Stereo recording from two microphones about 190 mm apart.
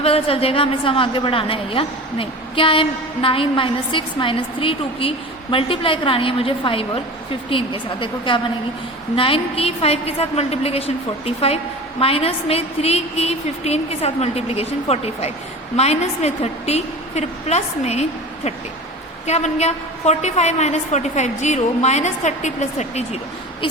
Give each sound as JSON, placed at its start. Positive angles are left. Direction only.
{"t": 0.0, "sound": "a woman's voice", "side_deg": 30}
{"t": 19.2, "sound": "a woman's voice", "side_deg": 35}